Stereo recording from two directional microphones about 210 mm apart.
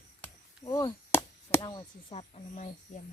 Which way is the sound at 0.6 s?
15° left (ahead or behind).